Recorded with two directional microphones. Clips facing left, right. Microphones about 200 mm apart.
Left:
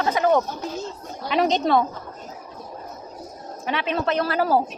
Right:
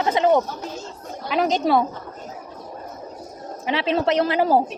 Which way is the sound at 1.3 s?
5° right (ahead or behind).